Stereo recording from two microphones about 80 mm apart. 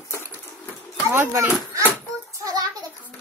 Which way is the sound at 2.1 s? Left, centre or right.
Right.